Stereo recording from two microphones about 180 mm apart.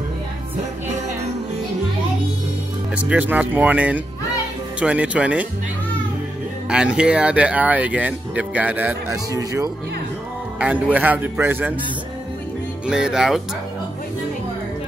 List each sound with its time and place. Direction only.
3.1 s speech: 10° right (ahead or behind)
6.7 s speech: 5° right (ahead or behind)
9.3 s speech: 20° right (ahead or behind)
10.6 s speech: 10° right (ahead or behind)
12.8 s speech: 5° right (ahead or behind)